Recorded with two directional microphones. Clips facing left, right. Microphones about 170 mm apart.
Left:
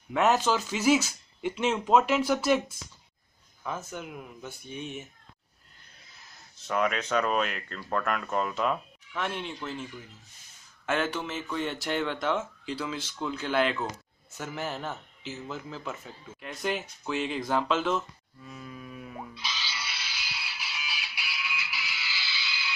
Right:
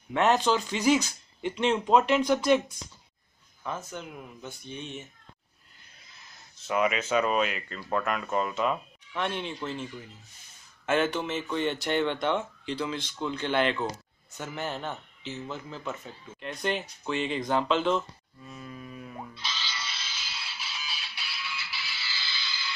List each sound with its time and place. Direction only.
0.1 s speech: 5° left (ahead or behind)
3.6 s speech: 5° left (ahead or behind)
6.6 s speech: 5° right (ahead or behind)
10.9 s speech: centre (ahead or behind)
14.3 s a sound: centre (ahead or behind)